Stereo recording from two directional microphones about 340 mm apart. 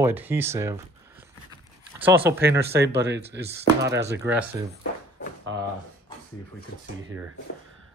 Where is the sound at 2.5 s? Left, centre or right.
Right.